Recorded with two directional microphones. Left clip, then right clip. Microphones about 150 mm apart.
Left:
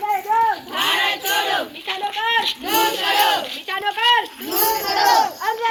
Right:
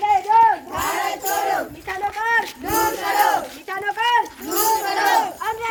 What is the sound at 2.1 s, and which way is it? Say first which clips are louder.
Child singing: left 1 dB; 50° right (ahead or behind).